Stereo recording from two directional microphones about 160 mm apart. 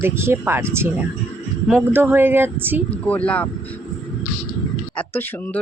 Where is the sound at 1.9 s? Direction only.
15° right (ahead or behind).